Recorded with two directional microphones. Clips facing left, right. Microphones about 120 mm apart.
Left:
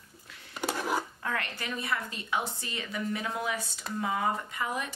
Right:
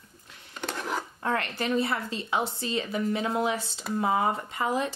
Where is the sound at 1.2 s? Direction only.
30° right (ahead or behind).